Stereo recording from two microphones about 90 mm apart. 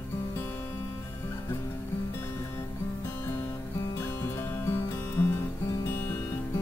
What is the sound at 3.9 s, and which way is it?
Music, 30° left (ahead or behind).